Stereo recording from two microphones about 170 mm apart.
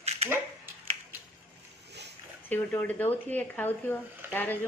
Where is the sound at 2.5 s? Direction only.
10° left (ahead or behind).